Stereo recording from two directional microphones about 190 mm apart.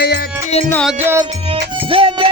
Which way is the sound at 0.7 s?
5° left (ahead or behind).